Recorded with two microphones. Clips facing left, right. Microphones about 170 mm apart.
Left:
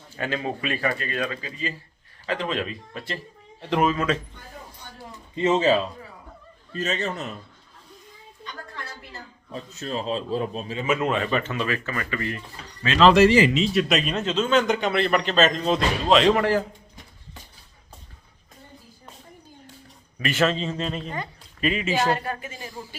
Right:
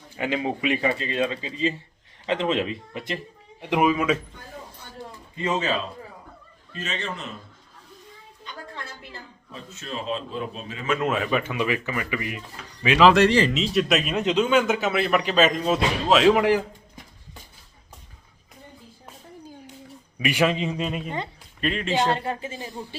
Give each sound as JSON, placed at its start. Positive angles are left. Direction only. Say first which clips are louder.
{"t": 0.2, "sound": "speech", "louder": "right 2 dB", "side_deg": -15}
{"t": 5.3, "sound": "speech", "louder": "left 6 dB", "side_deg": 25}
{"t": 6.7, "sound": "a man's voice", "louder": "left 5 dB", "side_deg": 40}
{"t": 9.8, "sound": "a man's voice", "louder": "left 2 dB", "side_deg": 35}
{"t": 10.8, "sound": "a man's voice", "louder": "even", "side_deg": 0}
{"t": 20.1, "sound": "speech", "louder": "right 1 dB", "side_deg": -10}
{"t": 21.6, "sound": "a man's voice", "louder": "left 1 dB", "side_deg": 5}
{"t": 22.1, "sound": "speech", "louder": "even", "side_deg": -25}